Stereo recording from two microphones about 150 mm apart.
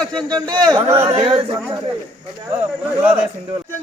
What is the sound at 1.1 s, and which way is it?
Speech, 35° right (ahead or behind).